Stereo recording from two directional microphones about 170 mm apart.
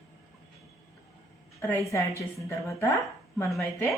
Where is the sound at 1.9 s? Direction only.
15° left (ahead or behind).